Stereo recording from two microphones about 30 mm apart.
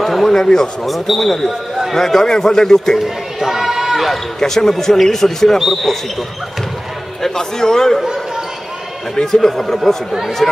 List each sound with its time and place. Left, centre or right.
0.0 s a sound: centre
0.3 s a man's voice: centre
0.8 s speech: centre
2.0 s a man's voice: centre
3.0 s a sound: centre
4.4 s a man's voice: centre
7.2 s a man's voice: centre
9.1 s a man's voice: centre